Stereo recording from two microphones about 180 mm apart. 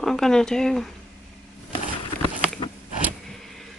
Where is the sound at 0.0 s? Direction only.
Centre (ahead or behind).